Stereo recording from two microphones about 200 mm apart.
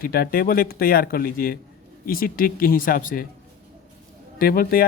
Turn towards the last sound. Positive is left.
turn(degrees=45)  # may be behind; listen again after turning